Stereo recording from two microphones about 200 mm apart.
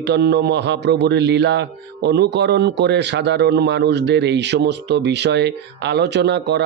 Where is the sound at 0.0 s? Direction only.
60° right (ahead or behind).